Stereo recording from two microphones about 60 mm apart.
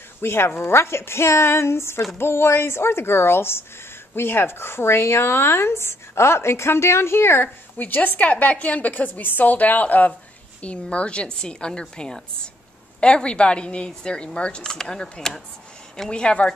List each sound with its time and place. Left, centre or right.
0.2 s speech: left
7.7 s a woman's voice: left